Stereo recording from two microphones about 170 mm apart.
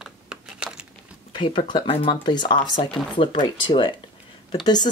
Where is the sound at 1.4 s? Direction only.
30° left (ahead or behind).